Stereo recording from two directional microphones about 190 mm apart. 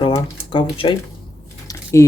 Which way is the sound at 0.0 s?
20° left (ahead or behind).